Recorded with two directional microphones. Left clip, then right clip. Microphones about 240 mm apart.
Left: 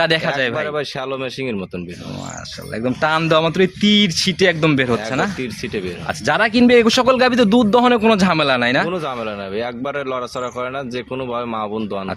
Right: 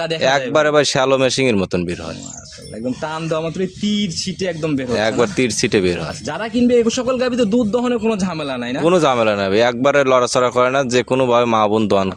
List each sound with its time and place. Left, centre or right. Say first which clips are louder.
0.0 s a man's voice: even; left
0.5 s a man's voice: right 8 dB; right
3.0 s a man's voice: left 8 dB; left
4.9 s a man's voice: right 5 dB; right
6.2 s a man's voice: left 6 dB; left
8.9 s a man's voice: right 9 dB; right